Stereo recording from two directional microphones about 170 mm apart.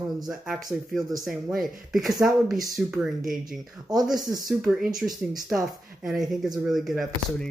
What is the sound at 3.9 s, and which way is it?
Speech, 25° right (ahead or behind).